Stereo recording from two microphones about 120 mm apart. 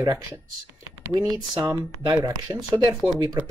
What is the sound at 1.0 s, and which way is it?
Speech, 25° right (ahead or behind).